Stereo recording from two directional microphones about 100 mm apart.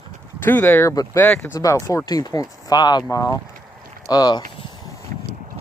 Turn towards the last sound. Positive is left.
turn(degrees=40)  # may be behind; listen again after turning